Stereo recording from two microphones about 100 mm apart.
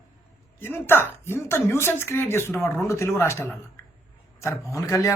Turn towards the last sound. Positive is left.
turn(degrees=35)  # may be behind; listen again after turning